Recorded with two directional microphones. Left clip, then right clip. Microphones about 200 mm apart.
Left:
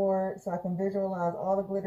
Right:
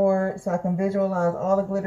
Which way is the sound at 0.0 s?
Centre (ahead or behind).